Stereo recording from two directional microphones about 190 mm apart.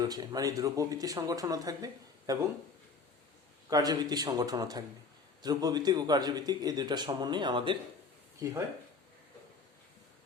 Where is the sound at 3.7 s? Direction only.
20° right (ahead or behind).